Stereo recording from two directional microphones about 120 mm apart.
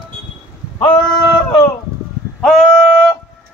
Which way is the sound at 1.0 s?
35° left (ahead or behind).